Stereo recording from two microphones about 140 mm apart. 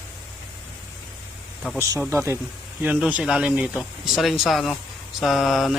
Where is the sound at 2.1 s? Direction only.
20° right (ahead or behind).